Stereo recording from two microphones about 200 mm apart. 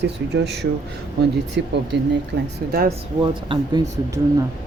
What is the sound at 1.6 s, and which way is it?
Speech, 65° right (ahead or behind).